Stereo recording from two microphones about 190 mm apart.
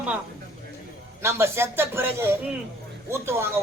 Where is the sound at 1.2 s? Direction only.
15° right (ahead or behind).